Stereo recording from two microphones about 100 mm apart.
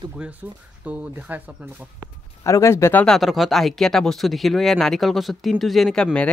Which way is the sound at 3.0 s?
Centre (ahead or behind).